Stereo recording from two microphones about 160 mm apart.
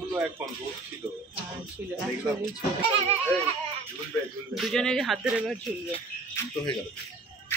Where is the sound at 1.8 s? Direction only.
10° right (ahead or behind).